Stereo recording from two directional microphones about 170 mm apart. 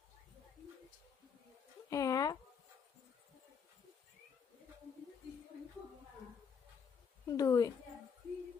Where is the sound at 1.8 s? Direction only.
20° left (ahead or behind).